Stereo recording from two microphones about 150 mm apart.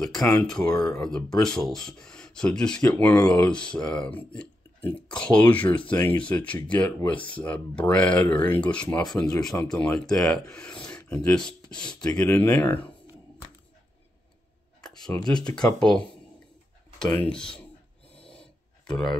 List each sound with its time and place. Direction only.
0.0 s speech: 5° left (ahead or behind)
15.0 s speech: 25° left (ahead or behind)
15.5 s speech: 5° left (ahead or behind)
17.0 s speech: 10° left (ahead or behind)
18.2 s a sound: 5° left (ahead or behind)